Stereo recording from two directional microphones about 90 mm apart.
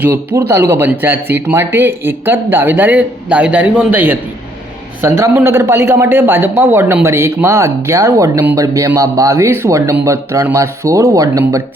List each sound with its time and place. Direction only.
0.0 s speech: 20° right (ahead or behind); by 11.6 s 40° right (ahead or behind)